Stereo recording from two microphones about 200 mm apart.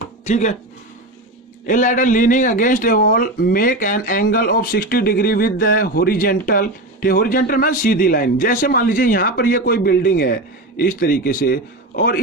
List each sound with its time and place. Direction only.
0.3 s speech: 35° left (ahead or behind)
1.6 s a man's voice: 40° left (ahead or behind)